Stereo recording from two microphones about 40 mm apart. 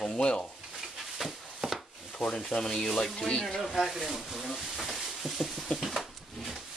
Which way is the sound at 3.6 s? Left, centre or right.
Centre.